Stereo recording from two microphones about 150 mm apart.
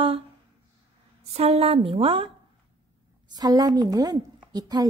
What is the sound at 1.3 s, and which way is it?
Speech, 40° right (ahead or behind).